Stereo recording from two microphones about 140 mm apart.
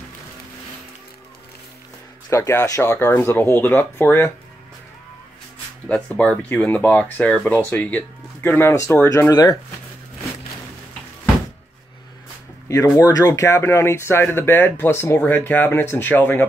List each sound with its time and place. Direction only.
2.2 s speech: 20° left (ahead or behind)
5.9 s speech: 10° left (ahead or behind); by 9.6 s 25° left (ahead or behind)
12.6 s speech: 20° left (ahead or behind)